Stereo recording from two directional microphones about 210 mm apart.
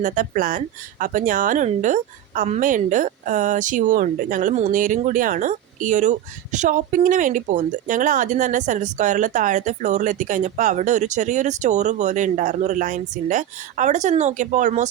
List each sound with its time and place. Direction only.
0.0 s speech: 40° right (ahead or behind)